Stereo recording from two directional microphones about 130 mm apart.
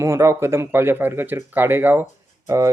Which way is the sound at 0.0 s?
20° right (ahead or behind).